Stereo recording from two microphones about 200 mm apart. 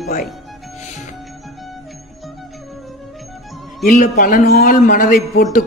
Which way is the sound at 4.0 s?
40° left (ahead or behind).